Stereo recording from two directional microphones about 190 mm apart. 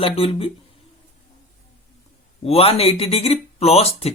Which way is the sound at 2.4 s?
30° left (ahead or behind).